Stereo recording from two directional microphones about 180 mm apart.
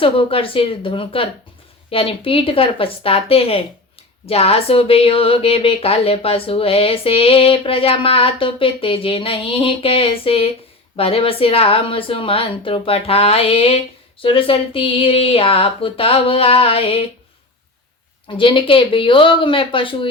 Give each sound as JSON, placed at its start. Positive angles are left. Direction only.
{"t": 0.0, "sound": "a woman's voice", "side_deg": 30}
{"t": 18.3, "sound": "speech", "side_deg": 25}